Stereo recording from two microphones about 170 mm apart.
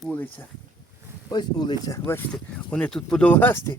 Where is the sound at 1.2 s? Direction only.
25° left (ahead or behind).